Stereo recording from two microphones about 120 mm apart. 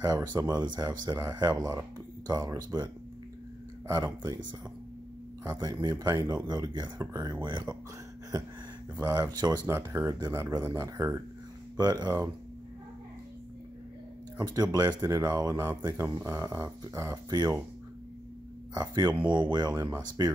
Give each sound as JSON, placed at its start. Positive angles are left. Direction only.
{"t": 0.3, "sound": "speech", "side_deg": -35}
{"t": 5.4, "sound": "speech", "side_deg": -30}
{"t": 8.9, "sound": "speech", "side_deg": -25}
{"t": 9.7, "sound": "speech", "side_deg": -20}
{"t": 11.7, "sound": "speech", "side_deg": -35}
{"t": 14.4, "sound": "speech", "side_deg": -35}
{"t": 18.8, "sound": "speech", "side_deg": -35}